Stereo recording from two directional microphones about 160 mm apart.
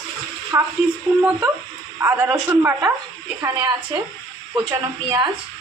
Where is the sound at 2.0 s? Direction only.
15° right (ahead or behind).